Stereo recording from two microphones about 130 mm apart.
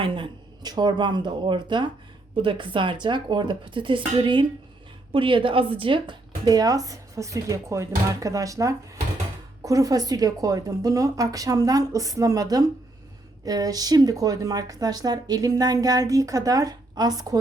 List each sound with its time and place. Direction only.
0.0 s a woman's voice: 40° right (ahead or behind)